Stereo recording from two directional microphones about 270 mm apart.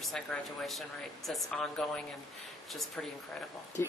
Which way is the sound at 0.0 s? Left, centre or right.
Centre.